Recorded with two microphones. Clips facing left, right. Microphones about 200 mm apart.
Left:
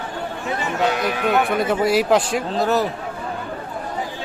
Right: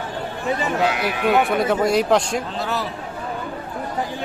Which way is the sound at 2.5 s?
45° left (ahead or behind).